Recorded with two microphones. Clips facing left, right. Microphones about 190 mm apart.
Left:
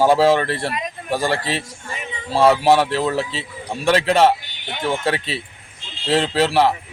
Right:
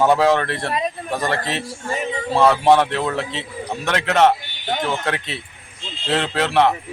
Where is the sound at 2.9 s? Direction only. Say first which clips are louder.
Left 2 dB; 30° left (ahead or behind).